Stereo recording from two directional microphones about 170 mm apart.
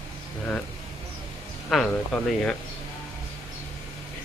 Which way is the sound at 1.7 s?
Centre (ahead or behind).